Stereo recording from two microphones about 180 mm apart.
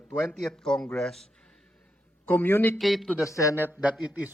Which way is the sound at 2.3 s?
10° left (ahead or behind).